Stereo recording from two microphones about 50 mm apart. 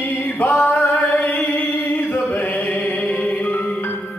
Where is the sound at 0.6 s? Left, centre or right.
Left.